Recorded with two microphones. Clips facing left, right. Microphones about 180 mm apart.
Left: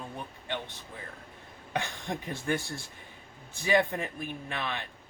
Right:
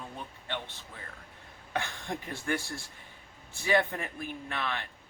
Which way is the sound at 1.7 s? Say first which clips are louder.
Left 1 dB; 20° left (ahead or behind).